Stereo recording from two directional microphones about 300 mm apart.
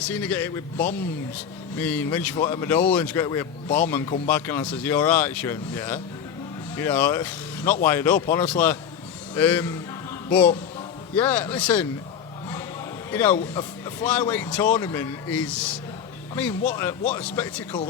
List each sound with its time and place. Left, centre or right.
0.0 s a man's voice: centre
13.1 s speech: centre